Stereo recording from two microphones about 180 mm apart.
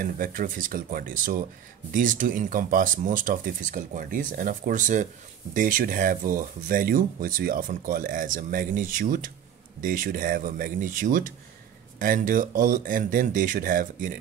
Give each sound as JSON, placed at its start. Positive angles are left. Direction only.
{"t": 0.0, "sound": "speech", "side_deg": -50}